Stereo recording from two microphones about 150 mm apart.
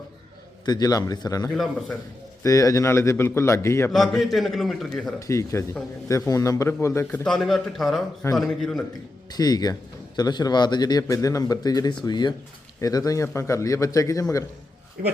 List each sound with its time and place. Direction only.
0.6 s speech: 25° left (ahead or behind)
1.5 s a man's voice: centre (ahead or behind)
2.4 s speech: 20° left (ahead or behind)
3.9 s a man's voice: centre (ahead or behind)
5.2 s a man's voice: 20° left (ahead or behind); by 8.8 s centre (ahead or behind)
9.3 s speech: 25° left (ahead or behind)